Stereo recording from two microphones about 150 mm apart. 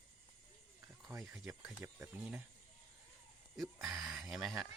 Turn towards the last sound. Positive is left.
turn(degrees=0)  # may be behind; listen again after turning